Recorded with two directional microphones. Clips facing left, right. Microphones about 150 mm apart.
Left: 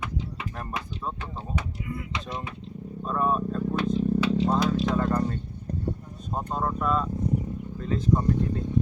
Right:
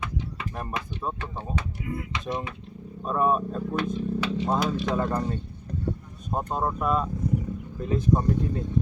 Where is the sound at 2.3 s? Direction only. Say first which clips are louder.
Right 7 dB; 20° right (ahead or behind).